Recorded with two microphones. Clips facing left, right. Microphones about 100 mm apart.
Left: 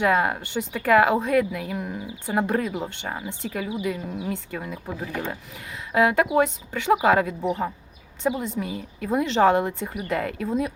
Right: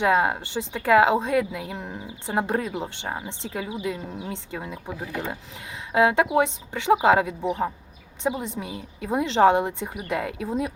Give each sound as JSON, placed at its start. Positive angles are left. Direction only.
{"t": 0.0, "sound": "a woman's voice", "side_deg": -25}